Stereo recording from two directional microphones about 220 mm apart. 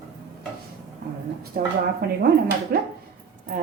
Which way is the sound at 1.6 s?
40° right (ahead or behind).